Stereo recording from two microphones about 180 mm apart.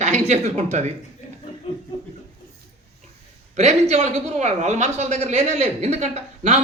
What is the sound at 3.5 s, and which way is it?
A woman's voice, 40° right (ahead or behind).